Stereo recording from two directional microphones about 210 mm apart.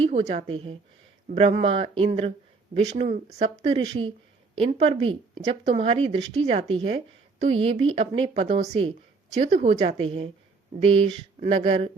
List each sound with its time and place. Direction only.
0.0 s speech: 30° right (ahead or behind)